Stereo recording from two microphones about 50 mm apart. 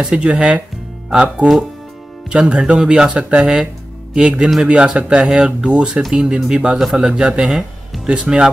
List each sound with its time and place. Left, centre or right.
0.0 s speech: right
7.4 s music: centre
8.1 s speech: centre